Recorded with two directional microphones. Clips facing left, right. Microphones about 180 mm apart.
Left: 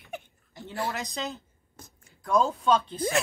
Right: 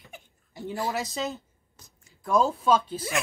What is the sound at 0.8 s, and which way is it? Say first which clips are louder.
Speech: right 2 dB; centre (ahead or behind).